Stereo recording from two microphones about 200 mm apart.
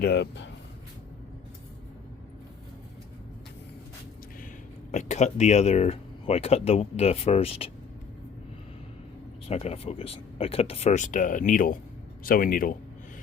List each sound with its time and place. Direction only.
0.0 s speech: 55° left (ahead or behind)
4.9 s speech: 35° left (ahead or behind)
9.5 s speech: 30° left (ahead or behind)